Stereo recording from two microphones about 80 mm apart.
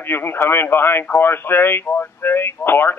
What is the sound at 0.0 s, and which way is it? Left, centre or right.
Speech, left.